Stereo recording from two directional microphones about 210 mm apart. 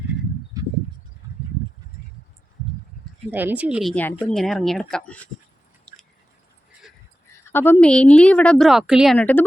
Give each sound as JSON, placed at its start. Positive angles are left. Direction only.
{"t": 0.6, "sound": "a sound", "side_deg": -15}
{"t": 3.3, "sound": "speech", "side_deg": -5}
{"t": 5.9, "sound": "chewing", "side_deg": 5}
{"t": 7.5, "sound": "speech", "side_deg": 10}